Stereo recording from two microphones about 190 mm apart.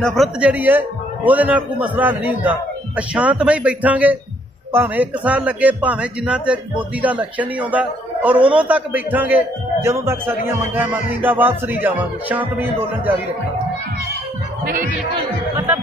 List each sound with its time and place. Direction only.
0.0 s a man's voice: centre (ahead or behind)
15.5 s speech: 10° right (ahead or behind)